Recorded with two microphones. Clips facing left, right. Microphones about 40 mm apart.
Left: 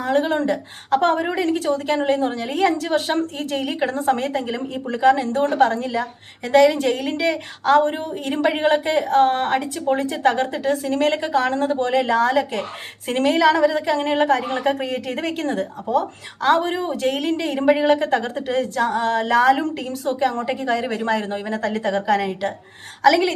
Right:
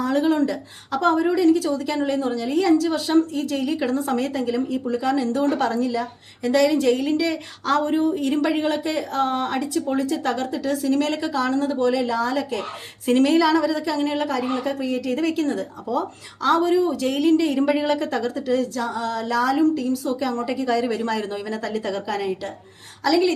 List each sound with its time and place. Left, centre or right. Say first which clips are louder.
0.0 s a woman's voice: even; left
13.1 s a woman's voice: even; left
20.2 s a woman's voice: left 4 dB; left